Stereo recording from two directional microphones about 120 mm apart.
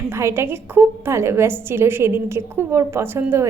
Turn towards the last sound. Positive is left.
turn(degrees=-20)  # may be behind; listen again after turning